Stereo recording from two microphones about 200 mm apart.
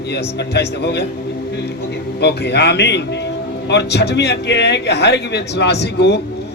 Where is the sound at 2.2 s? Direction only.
55° left (ahead or behind).